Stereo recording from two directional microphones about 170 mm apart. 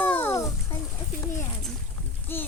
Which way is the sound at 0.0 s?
10° left (ahead or behind).